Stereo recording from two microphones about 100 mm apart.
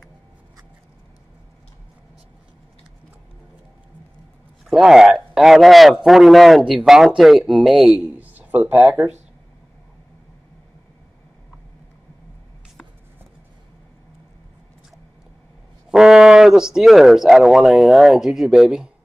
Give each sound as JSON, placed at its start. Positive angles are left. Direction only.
{"t": 4.6, "sound": "speech", "side_deg": -5}
{"t": 7.9, "sound": "speech", "side_deg": -15}
{"t": 15.9, "sound": "speech", "side_deg": -5}